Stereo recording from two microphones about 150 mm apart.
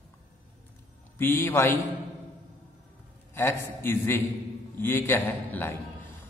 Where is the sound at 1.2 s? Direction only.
15° left (ahead or behind).